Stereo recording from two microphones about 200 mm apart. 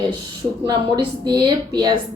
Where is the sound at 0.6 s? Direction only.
20° right (ahead or behind).